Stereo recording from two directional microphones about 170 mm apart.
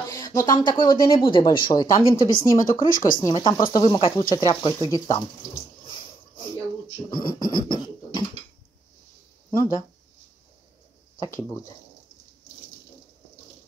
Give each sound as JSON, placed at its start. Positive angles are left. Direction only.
{"t": 0.5, "sound": "speech", "side_deg": 25}
{"t": 7.1, "sound": "beatboxing", "side_deg": 25}
{"t": 9.5, "sound": "speech", "side_deg": 20}